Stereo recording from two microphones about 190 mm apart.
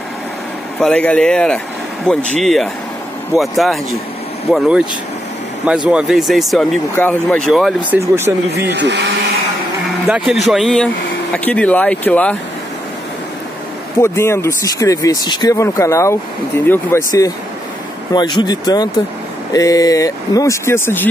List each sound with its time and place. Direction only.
0.7 s speech: 5° left (ahead or behind)
5.9 s speech: 5° right (ahead or behind)
8.5 s speech: 60° right (ahead or behind)
10.0 s speech: 5° right (ahead or behind)
13.9 s speech: 15° left (ahead or behind)